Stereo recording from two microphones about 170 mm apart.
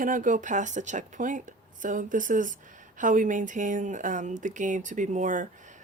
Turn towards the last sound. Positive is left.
turn(degrees=-45)  # may be behind; listen again after turning